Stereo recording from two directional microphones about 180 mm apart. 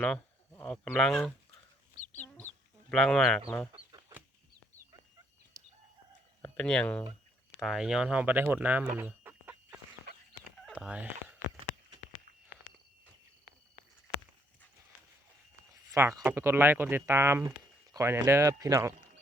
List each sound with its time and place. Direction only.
0.0 s speech: 5° left (ahead or behind)
2.1 s chicken: 10° left (ahead or behind)
2.9 s speech: centre (ahead or behind)
3.9 s chicken: 20° right (ahead or behind)
6.4 s speech: 5° left (ahead or behind)
9.0 s chicken: 10° right (ahead or behind)
10.7 s a sound: 5° right (ahead or behind)
15.7 s speech: 15° right (ahead or behind)